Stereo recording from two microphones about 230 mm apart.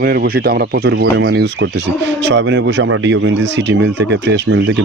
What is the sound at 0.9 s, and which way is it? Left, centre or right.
Speech, right.